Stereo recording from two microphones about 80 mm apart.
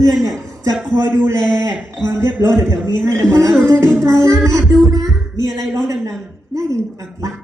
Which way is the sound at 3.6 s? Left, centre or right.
Right.